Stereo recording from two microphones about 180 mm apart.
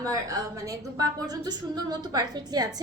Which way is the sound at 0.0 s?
20° right (ahead or behind).